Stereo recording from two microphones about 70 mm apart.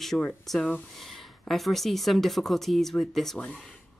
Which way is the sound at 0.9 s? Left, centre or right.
Centre.